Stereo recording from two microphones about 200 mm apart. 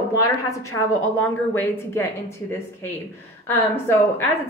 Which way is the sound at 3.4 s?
10° left (ahead or behind).